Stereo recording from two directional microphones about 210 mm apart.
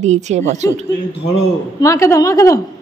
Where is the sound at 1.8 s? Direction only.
15° left (ahead or behind).